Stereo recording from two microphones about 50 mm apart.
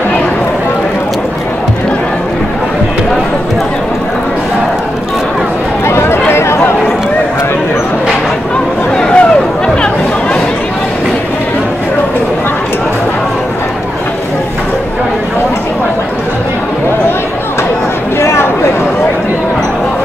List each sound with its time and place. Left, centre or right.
5.9 s run: left
6.3 s chatter: left
8.9 s a sound: centre